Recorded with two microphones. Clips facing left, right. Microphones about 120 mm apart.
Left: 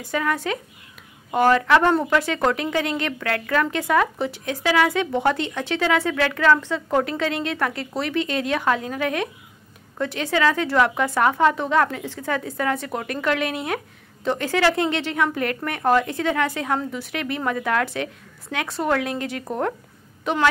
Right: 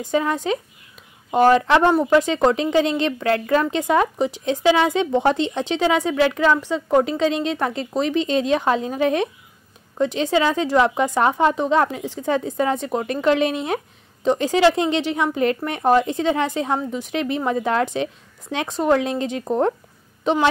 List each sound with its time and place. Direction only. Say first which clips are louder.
0.0 s speech: right 3 dB; 20° right (ahead or behind)